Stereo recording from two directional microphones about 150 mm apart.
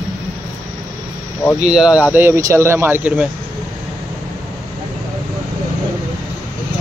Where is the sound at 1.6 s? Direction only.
5° right (ahead or behind).